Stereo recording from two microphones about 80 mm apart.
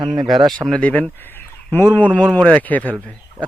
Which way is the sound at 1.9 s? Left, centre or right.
Centre.